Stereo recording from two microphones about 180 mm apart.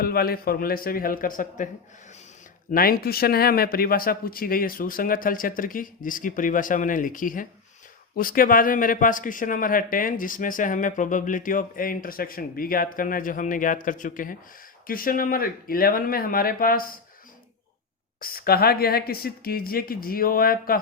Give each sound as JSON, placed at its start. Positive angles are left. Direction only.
{"t": 0.0, "sound": "a woman's voice", "side_deg": 55}
{"t": 2.7, "sound": "a man's voice", "side_deg": 55}
{"t": 18.2, "sound": "a woman's voice", "side_deg": 55}